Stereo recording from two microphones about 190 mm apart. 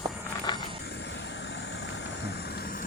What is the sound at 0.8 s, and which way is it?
Vehicle, 60° left (ahead or behind).